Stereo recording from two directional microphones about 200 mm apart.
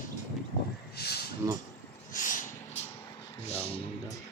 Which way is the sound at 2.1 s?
40° left (ahead or behind).